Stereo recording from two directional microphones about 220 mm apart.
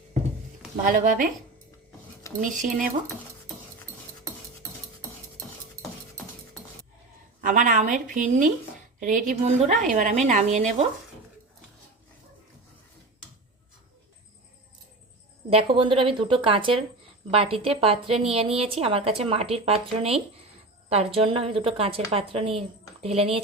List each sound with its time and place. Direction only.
0.9 s a woman's voice: 40° right (ahead or behind)
2.4 s a woman's voice: 35° right (ahead or behind)
7.4 s a woman's voice: 35° right (ahead or behind)
15.4 s a woman's voice: 25° right (ahead or behind)